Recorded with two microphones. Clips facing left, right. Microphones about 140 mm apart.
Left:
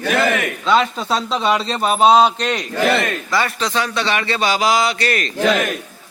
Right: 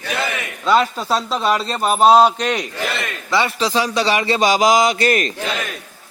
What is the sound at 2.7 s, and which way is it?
Speech, 55° left (ahead or behind).